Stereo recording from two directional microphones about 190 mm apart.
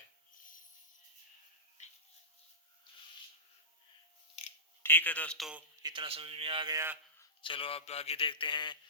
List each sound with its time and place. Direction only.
4.8 s a man's voice: 10° left (ahead or behind)
5.8 s a man's voice: 25° right (ahead or behind)
7.4 s a man's voice: 30° left (ahead or behind)